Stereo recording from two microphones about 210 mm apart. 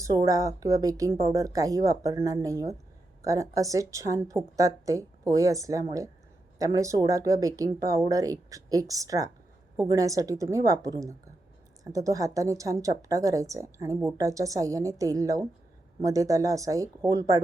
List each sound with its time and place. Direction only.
0.0 s speech: 15° right (ahead or behind)